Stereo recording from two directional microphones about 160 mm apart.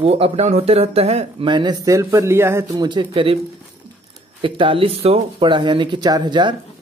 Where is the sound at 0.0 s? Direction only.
40° right (ahead or behind).